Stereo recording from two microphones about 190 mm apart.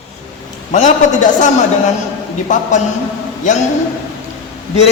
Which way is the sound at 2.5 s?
40° left (ahead or behind).